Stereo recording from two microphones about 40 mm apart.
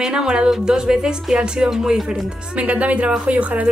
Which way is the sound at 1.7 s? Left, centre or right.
Centre.